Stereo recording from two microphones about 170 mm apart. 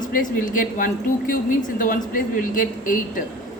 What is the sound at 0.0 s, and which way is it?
Speech, 50° left (ahead or behind).